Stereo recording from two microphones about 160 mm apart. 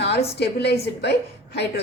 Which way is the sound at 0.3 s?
90° left.